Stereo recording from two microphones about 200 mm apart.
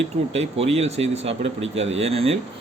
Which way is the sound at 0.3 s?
30° right (ahead or behind).